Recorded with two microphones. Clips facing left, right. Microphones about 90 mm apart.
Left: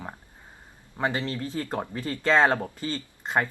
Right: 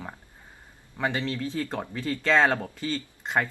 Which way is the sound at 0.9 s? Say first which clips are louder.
Even; 25° left (ahead or behind).